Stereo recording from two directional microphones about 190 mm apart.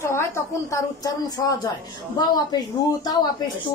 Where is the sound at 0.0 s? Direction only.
15° left (ahead or behind).